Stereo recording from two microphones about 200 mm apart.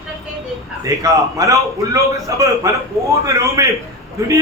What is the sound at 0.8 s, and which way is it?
A man's voice, 15° right (ahead or behind).